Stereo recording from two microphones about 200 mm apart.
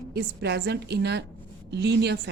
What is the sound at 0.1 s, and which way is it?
A woman's voice, 55° right (ahead or behind).